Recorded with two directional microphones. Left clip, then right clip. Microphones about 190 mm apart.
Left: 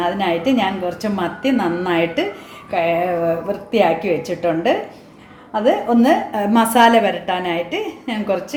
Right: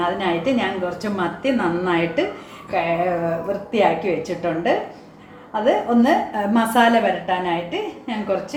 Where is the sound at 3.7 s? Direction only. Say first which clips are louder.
Left 3 dB; 65° left (ahead or behind).